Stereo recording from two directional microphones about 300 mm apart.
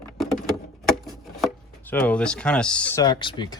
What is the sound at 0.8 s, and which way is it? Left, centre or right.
Speech, centre.